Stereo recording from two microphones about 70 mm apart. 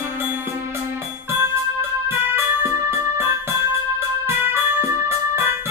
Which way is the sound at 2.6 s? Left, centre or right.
Right.